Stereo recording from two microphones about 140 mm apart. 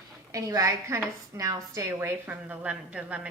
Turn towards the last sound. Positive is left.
turn(degrees=-10)  # may be behind; listen again after turning